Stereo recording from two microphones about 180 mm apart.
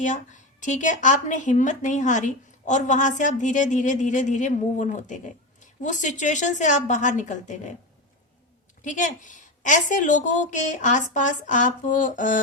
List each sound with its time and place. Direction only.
0.0 s a woman's voice: 45° left (ahead or behind)
8.8 s a woman's voice: 45° left (ahead or behind)